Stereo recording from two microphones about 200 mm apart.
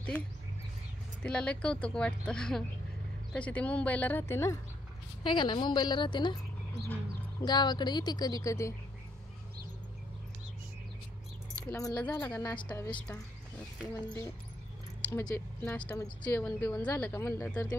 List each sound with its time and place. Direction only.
1.2 s speech: 5° left (ahead or behind)
5.2 s speech: 25° left (ahead or behind)
7.4 s speech: 20° left (ahead or behind)
11.7 s speech: 10° left (ahead or behind)